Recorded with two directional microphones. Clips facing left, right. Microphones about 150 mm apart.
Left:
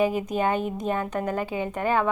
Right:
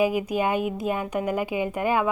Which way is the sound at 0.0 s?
10° right (ahead or behind).